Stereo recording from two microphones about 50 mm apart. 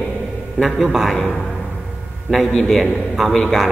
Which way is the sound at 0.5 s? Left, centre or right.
Centre.